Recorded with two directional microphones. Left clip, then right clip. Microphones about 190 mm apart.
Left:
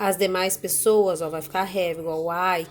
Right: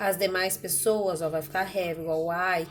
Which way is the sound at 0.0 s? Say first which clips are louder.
Left 4 dB; 30° left (ahead or behind).